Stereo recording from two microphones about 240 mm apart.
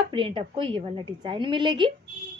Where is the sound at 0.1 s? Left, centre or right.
Right.